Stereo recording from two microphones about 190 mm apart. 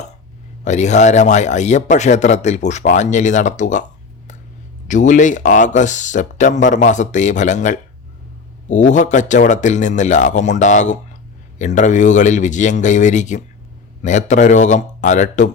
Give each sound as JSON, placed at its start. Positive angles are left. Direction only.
{"t": 0.6, "sound": "speech", "side_deg": 40}
{"t": 4.9, "sound": "speech", "side_deg": 40}